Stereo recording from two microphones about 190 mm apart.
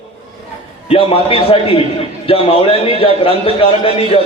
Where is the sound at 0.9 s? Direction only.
30° left (ahead or behind).